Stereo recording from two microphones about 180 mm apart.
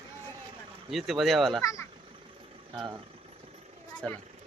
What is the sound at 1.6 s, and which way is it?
Speech, 15° left (ahead or behind).